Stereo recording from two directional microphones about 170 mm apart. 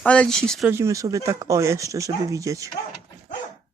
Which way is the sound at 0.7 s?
15° right (ahead or behind).